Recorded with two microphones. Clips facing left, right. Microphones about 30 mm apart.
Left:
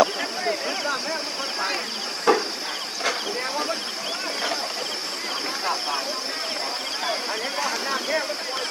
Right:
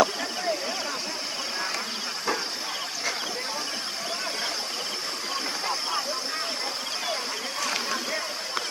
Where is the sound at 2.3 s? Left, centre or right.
Left.